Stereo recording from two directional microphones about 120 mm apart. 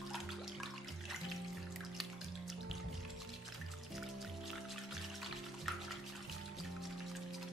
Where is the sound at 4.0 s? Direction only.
Centre (ahead or behind).